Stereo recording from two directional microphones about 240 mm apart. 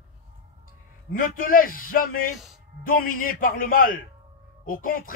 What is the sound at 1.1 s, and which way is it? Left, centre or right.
A man's voice, left.